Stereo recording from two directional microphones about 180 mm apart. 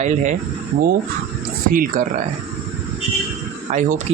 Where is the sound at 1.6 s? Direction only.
50° right (ahead or behind).